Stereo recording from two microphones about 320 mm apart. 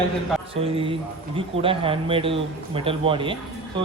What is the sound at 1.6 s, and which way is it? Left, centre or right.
Speech, centre.